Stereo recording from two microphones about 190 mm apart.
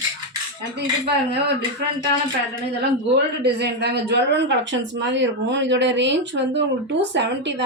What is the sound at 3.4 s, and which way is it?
Speech, 60° right (ahead or behind).